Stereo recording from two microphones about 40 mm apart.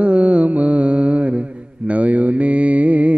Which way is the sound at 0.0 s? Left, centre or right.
Right.